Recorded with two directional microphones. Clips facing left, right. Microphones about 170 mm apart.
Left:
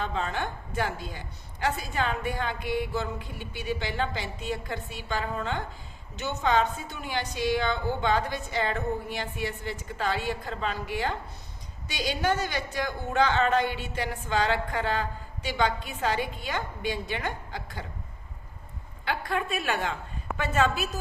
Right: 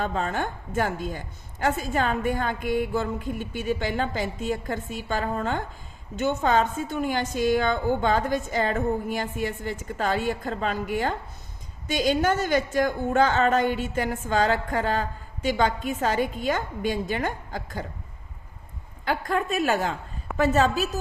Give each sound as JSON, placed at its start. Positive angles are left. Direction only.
{"t": 0.0, "sound": "a woman's voice", "side_deg": -45}
{"t": 19.0, "sound": "a woman's voice", "side_deg": -45}